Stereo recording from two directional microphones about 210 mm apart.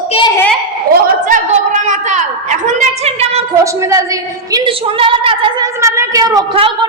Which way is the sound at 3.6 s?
15° right (ahead or behind).